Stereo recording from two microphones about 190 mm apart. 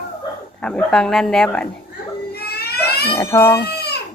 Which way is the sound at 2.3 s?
55° left (ahead or behind).